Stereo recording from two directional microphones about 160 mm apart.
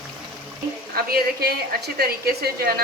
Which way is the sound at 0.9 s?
75° right (ahead or behind).